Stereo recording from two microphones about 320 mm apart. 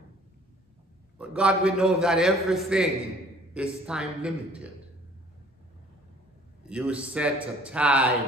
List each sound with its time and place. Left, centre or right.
1.1 s a man's voice: centre
6.7 s a man's voice: centre